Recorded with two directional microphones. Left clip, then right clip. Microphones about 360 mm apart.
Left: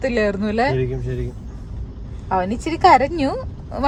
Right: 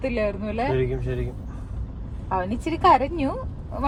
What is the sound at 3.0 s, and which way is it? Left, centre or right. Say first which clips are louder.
Speech: left 6 dB; left.